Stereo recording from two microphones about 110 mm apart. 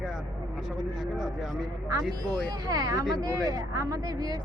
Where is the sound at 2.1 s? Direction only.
35° right (ahead or behind).